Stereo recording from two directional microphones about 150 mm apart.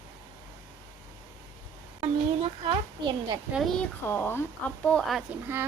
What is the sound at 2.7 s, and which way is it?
Speech, 30° right (ahead or behind).